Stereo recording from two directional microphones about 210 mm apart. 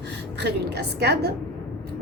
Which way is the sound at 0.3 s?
55° right (ahead or behind).